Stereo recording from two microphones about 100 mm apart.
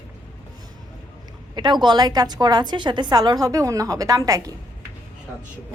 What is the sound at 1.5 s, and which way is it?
A woman's voice, 50° right (ahead or behind).